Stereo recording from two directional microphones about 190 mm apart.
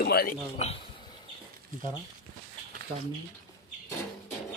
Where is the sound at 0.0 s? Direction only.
50° left (ahead or behind).